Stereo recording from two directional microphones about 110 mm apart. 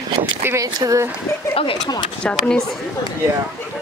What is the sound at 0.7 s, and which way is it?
Speech, 30° right (ahead or behind).